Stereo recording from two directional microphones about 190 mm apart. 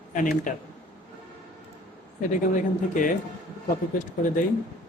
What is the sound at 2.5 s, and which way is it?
Speech, 45° left (ahead or behind).